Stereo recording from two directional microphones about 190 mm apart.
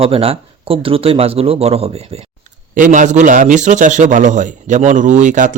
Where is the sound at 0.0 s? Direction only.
30° right (ahead or behind).